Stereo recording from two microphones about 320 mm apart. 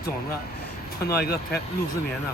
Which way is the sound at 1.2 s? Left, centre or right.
Left.